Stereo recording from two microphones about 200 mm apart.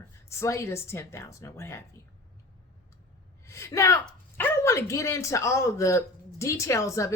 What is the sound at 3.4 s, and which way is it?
A woman's voice, 15° left (ahead or behind).